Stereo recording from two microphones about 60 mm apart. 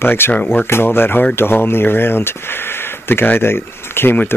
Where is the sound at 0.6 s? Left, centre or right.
Left.